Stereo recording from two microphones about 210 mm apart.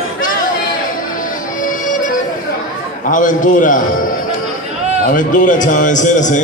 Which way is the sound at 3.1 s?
40° left (ahead or behind).